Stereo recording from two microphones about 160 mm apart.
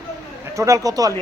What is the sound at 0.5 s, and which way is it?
Speech, 20° right (ahead or behind).